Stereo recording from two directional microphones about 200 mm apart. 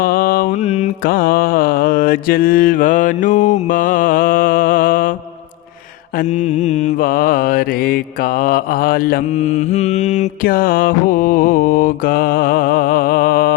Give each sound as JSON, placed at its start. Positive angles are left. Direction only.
{"t": 0.0, "sound": "mantra", "side_deg": 45}
{"t": 6.1, "sound": "mantra", "side_deg": 35}